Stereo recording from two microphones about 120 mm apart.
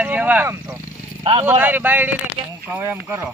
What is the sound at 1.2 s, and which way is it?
Speech, 55° right (ahead or behind).